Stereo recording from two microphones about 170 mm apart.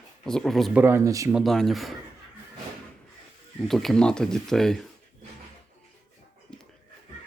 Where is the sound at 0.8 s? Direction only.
15° right (ahead or behind).